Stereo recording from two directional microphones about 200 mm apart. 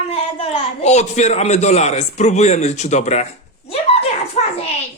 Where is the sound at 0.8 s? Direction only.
35° left (ahead or behind).